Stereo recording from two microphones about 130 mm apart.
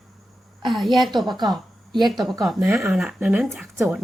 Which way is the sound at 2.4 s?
Centre (ahead or behind).